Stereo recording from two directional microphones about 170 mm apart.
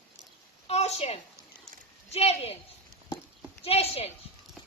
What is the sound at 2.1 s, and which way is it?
Speech, 40° left (ahead or behind).